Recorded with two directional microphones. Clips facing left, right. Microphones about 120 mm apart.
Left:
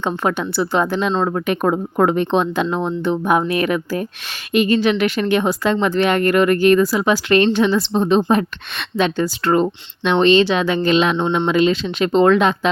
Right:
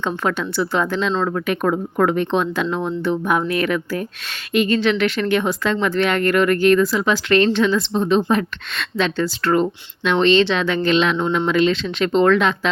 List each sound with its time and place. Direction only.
0.0 s a woman's voice: 15° left (ahead or behind)
1.1 s a woman's voice: 30° left (ahead or behind)